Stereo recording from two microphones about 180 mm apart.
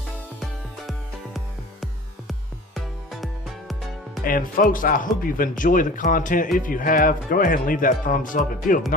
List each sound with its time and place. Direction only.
2.7 s music: centre (ahead or behind)
4.2 s speech: 50° left (ahead or behind)